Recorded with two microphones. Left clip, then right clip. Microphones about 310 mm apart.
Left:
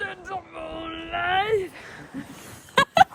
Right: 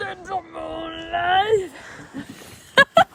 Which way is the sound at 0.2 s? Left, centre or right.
Right.